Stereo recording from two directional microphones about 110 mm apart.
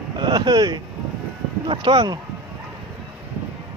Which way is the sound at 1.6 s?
55° right (ahead or behind).